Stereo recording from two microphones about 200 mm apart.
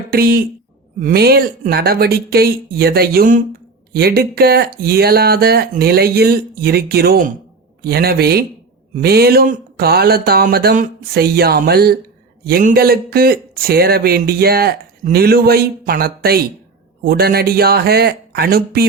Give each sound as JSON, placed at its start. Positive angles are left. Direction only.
{"t": 0.1, "sound": "speech", "side_deg": -50}